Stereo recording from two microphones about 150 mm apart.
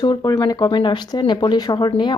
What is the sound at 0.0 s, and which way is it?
Speech, 25° left (ahead or behind).